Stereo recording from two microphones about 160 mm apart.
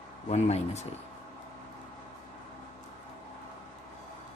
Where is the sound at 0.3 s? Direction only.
45° left (ahead or behind).